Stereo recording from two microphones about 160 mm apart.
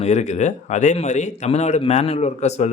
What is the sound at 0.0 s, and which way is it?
Speech, 45° left (ahead or behind).